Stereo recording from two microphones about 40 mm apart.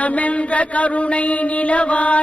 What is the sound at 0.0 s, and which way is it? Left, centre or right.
Mantra, left.